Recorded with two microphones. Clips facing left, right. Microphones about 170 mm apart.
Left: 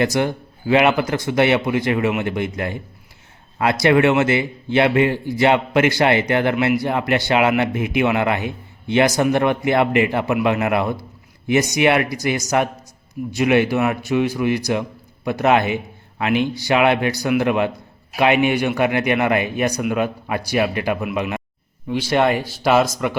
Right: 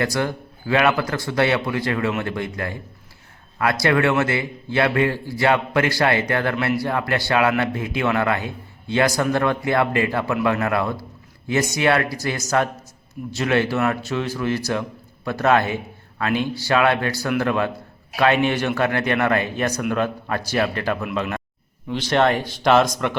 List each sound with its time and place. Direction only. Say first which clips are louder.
0.0 s a man's voice: left 4 dB; 20° left (ahead or behind); by 23.1 s 5° left (ahead or behind)